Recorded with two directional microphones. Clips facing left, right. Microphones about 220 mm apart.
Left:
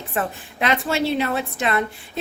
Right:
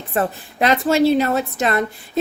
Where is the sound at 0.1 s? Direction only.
40° right (ahead or behind).